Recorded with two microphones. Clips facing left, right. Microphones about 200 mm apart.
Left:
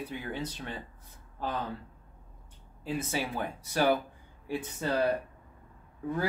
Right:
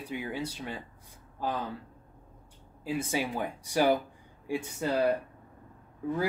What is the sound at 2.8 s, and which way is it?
A man's voice, 10° right (ahead or behind).